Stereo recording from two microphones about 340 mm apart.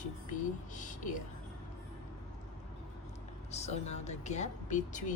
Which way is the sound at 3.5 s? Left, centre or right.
Centre.